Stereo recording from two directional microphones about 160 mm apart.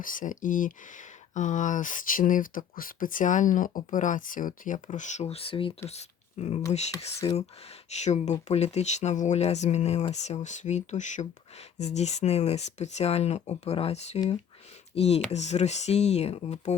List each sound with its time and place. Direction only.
0.0 s speech: 55° left (ahead or behind); by 16.7 s 40° left (ahead or behind)